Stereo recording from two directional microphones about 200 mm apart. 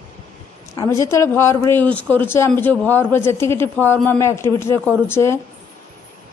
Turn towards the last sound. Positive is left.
turn(degrees=10)  # may be behind; listen again after turning